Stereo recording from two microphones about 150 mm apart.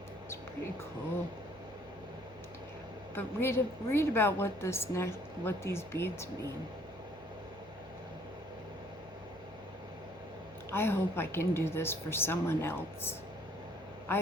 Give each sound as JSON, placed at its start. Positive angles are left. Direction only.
{"t": 3.2, "sound": "a woman's voice", "side_deg": 15}
{"t": 10.7, "sound": "a woman's voice", "side_deg": 15}